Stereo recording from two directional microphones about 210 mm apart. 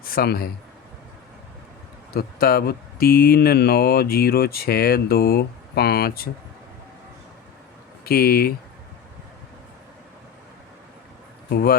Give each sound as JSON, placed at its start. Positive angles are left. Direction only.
{"t": 0.0, "sound": "speech", "side_deg": 45}
{"t": 2.1, "sound": "speech", "side_deg": 45}
{"t": 8.0, "sound": "speech", "side_deg": 45}
{"t": 11.5, "sound": "speech", "side_deg": 45}